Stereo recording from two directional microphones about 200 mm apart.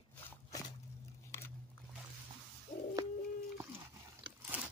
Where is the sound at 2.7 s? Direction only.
35° left (ahead or behind).